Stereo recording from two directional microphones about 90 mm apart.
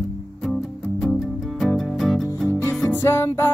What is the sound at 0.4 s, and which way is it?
Music, 5° left (ahead or behind).